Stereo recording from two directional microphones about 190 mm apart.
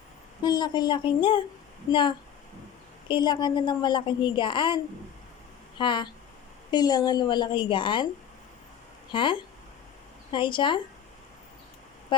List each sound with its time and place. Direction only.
0.4 s a woman's voice: 20° left (ahead or behind)
9.1 s a woman's voice: 25° left (ahead or behind)